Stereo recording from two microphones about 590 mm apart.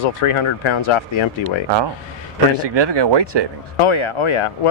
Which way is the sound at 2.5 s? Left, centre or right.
Right.